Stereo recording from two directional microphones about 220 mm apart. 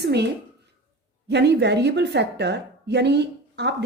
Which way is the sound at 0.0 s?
50° right (ahead or behind).